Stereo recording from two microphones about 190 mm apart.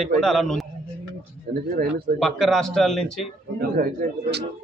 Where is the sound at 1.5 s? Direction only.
50° right (ahead or behind).